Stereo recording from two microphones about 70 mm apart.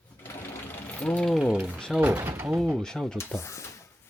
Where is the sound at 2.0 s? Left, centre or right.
Right.